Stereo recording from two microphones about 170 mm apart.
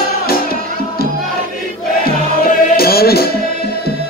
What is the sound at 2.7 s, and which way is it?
Music, 65° left (ahead or behind).